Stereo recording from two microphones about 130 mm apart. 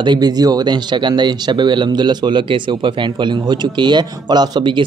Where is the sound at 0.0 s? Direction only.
35° right (ahead or behind).